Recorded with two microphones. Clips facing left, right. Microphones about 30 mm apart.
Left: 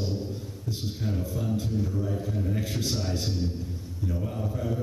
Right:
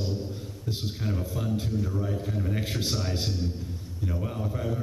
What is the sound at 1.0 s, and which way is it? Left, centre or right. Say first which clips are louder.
A man's voice: left 1 dB; centre.